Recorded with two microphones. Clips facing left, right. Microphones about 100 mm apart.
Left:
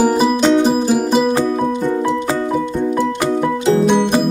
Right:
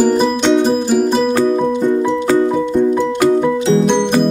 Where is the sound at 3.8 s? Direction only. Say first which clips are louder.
Even; 5° left (ahead or behind).